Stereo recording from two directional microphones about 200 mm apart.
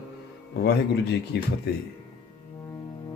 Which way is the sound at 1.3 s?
60° left (ahead or behind).